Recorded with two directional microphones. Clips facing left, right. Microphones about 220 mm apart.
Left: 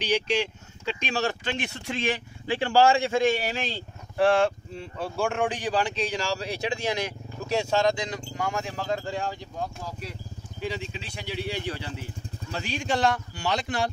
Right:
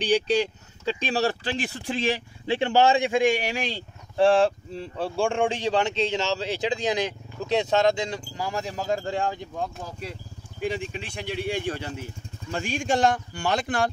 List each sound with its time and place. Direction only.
0.0 s speech: 35° right (ahead or behind); by 3.8 s 15° right (ahead or behind)
4.2 s speech: 30° right (ahead or behind)
10.6 s speech: 50° right (ahead or behind)